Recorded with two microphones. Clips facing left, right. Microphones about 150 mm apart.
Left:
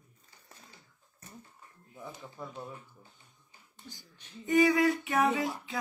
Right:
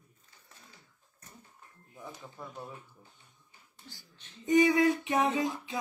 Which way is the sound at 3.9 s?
15° left (ahead or behind).